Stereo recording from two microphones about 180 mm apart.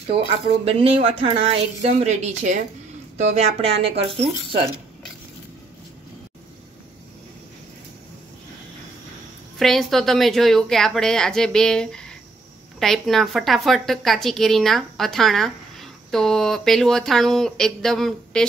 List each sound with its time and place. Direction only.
0.7 s speech: 30° right (ahead or behind)
9.6 s a woman's voice: centre (ahead or behind)